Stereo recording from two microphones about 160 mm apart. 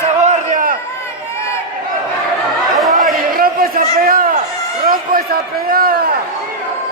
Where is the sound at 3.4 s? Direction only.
65° right (ahead or behind).